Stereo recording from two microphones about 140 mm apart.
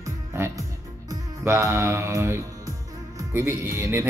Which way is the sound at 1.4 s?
20° right (ahead or behind).